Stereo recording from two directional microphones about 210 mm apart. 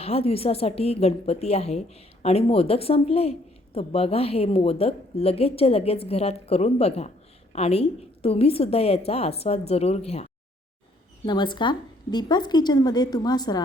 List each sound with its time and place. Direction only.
0.0 s speech: 30° left (ahead or behind)
11.3 s speech: 20° left (ahead or behind)